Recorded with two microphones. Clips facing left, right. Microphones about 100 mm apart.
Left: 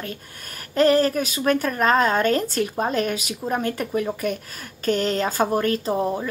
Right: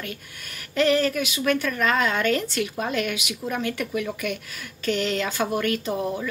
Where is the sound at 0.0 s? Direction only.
40° left (ahead or behind).